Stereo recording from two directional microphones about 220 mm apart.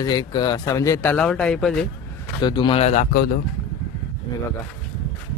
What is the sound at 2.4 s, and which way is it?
Speech, 20° left (ahead or behind).